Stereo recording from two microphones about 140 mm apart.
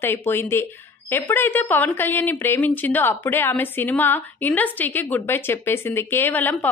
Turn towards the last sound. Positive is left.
turn(degrees=15)  # may be behind; listen again after turning